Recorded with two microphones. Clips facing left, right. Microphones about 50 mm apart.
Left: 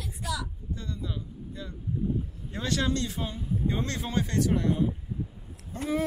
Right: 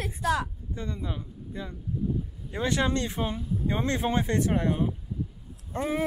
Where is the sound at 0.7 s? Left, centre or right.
Right.